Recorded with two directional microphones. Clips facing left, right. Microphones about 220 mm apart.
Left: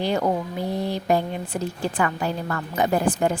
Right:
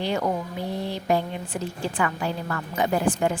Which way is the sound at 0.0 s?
40° left (ahead or behind).